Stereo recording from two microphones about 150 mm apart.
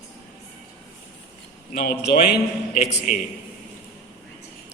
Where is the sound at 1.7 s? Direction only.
85° left.